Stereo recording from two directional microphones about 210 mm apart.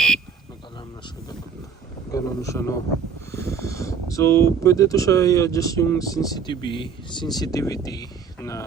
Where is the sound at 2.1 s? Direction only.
15° left (ahead or behind).